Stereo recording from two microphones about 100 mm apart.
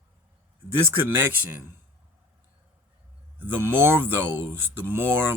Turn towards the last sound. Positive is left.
turn(degrees=-20)  # may be behind; listen again after turning